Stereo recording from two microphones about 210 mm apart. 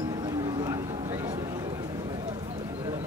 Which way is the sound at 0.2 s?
20° right (ahead or behind).